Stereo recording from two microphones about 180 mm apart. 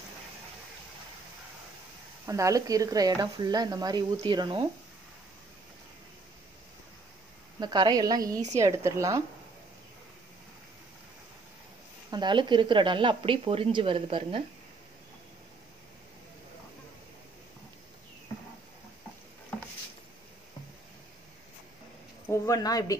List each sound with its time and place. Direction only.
2.2 s speech: 15° right (ahead or behind)
7.6 s a woman's voice: 25° right (ahead or behind)
12.1 s speech: 25° right (ahead or behind)
22.3 s speech: 20° left (ahead or behind)